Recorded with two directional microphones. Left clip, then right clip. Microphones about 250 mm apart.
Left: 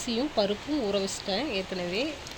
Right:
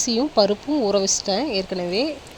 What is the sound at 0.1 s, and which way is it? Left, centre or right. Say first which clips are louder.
A woman's voice: right 8 dB; right.